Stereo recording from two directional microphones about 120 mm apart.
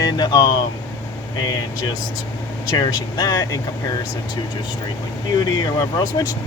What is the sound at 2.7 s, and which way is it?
Speech, 35° left (ahead or behind).